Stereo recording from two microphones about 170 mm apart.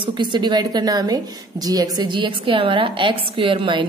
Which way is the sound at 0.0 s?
25° right (ahead or behind).